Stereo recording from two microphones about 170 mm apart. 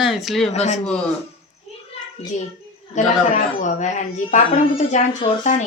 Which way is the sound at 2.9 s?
45° left (ahead or behind).